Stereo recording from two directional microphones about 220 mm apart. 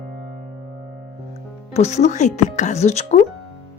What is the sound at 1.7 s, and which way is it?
Speech, 30° left (ahead or behind).